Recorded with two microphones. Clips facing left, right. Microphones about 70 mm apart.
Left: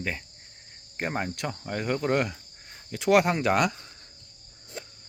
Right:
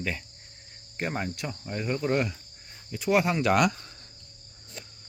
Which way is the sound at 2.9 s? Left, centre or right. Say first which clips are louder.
Left 3 dB; left.